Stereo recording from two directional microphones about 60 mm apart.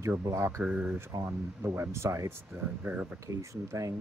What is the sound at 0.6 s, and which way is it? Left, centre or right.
Speech, centre.